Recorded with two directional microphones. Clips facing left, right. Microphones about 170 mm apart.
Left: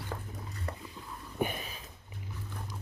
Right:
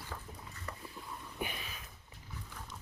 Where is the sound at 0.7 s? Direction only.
35° left (ahead or behind).